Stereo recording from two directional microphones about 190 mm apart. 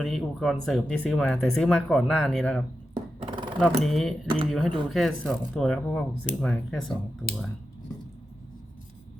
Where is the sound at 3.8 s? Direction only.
Centre (ahead or behind).